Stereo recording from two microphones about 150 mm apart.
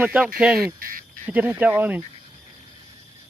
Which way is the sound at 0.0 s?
10° right (ahead or behind).